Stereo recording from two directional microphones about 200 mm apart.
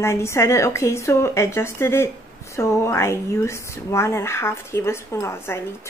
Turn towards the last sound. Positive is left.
turn(degrees=15)  # may be behind; listen again after turning